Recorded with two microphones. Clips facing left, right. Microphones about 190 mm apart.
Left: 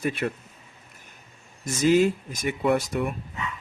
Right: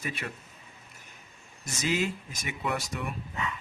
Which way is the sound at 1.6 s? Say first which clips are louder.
Left 10 dB; 50° left (ahead or behind).